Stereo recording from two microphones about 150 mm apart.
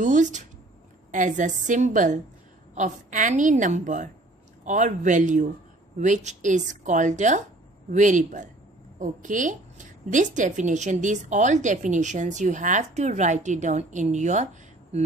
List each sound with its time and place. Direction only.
0.0 s a woman's voice: 55° right (ahead or behind)